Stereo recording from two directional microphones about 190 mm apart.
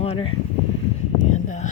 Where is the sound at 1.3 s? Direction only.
40° left (ahead or behind).